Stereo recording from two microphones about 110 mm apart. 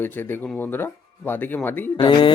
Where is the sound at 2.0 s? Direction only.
45° left (ahead or behind).